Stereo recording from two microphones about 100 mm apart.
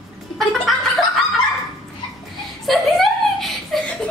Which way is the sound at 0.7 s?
Centre (ahead or behind).